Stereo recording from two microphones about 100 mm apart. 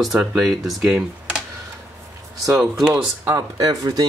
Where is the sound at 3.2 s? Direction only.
35° right (ahead or behind).